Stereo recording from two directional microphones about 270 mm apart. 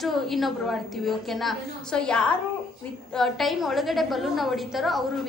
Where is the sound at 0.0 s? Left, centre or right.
Centre.